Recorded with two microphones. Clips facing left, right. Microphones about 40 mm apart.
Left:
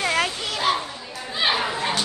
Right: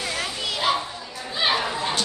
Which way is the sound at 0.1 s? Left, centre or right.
Left.